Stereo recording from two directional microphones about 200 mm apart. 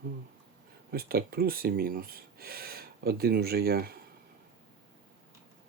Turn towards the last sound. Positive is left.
turn(degrees=-50)  # may be behind; listen again after turning